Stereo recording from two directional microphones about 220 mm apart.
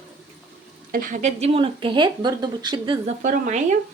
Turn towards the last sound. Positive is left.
turn(degrees=-35)  # may be behind; listen again after turning